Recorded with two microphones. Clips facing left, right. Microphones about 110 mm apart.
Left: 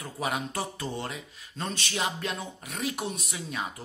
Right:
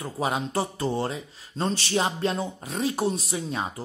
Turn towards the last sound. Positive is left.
turn(degrees=-30)  # may be behind; listen again after turning